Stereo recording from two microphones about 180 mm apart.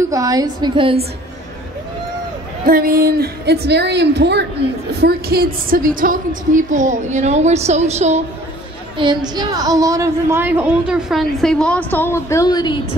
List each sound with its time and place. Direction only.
0.1 s a woman's voice: 20° right (ahead or behind)
2.6 s a woman's voice: 55° right (ahead or behind); by 8.2 s 35° right (ahead or behind)
8.9 s a woman's voice: 25° right (ahead or behind); by 12.8 s 25° left (ahead or behind)